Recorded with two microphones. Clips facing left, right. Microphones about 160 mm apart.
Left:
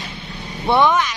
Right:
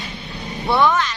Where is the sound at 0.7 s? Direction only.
20° left (ahead or behind).